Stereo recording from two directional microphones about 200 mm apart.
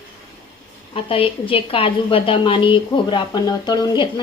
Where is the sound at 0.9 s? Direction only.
25° left (ahead or behind).